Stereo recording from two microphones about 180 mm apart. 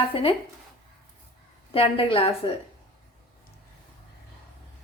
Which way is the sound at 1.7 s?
30° left (ahead or behind).